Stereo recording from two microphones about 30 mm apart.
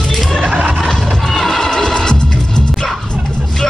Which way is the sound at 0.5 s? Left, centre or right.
Right.